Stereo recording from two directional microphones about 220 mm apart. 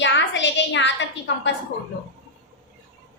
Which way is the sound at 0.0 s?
55° left (ahead or behind).